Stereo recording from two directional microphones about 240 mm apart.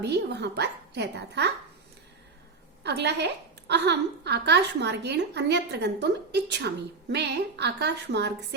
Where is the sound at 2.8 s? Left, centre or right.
Right.